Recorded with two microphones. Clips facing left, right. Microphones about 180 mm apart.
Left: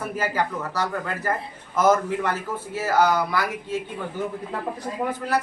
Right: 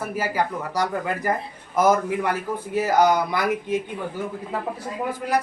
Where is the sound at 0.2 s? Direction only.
10° right (ahead or behind).